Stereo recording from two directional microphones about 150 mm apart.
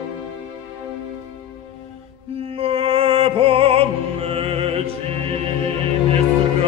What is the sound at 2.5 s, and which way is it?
Opera, 40° right (ahead or behind).